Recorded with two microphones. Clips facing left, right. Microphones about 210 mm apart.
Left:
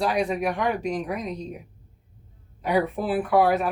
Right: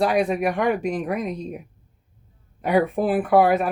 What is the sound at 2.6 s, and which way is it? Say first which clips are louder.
Speech: right 4 dB; 50° right (ahead or behind).